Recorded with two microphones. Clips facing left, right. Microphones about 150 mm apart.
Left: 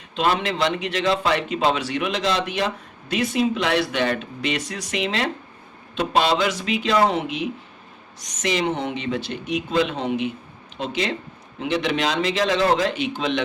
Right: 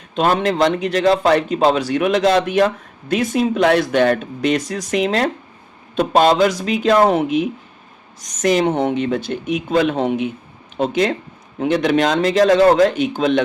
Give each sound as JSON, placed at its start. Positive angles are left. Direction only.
{"t": 0.2, "sound": "a man's voice", "side_deg": -45}